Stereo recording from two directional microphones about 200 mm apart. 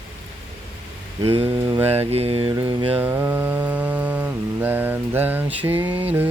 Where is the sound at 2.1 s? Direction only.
30° right (ahead or behind).